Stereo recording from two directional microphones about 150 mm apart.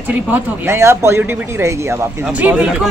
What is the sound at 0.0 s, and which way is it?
A woman's voice, 10° right (ahead or behind).